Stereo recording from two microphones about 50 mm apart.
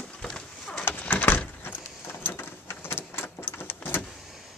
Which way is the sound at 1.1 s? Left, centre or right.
Left.